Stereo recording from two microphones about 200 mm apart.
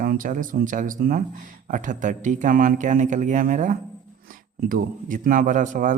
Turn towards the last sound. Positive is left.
turn(degrees=-40)  # may be behind; listen again after turning